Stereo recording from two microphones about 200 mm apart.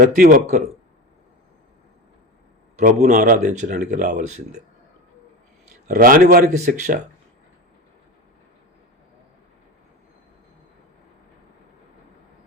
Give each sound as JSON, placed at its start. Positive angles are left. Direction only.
{"t": 0.0, "sound": "speech", "side_deg": -45}
{"t": 2.7, "sound": "speech", "side_deg": -35}
{"t": 5.9, "sound": "speech", "side_deg": -45}